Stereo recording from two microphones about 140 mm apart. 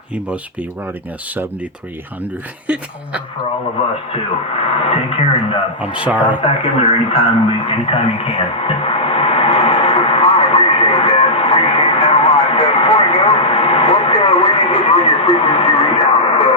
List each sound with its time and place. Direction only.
4.8 s speech: 45° left (ahead or behind)
5.8 s speech: 10° right (ahead or behind)
6.4 s radio: 40° left (ahead or behind)